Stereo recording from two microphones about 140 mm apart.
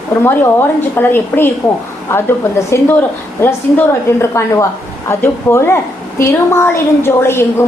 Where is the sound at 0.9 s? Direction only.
15° left (ahead or behind).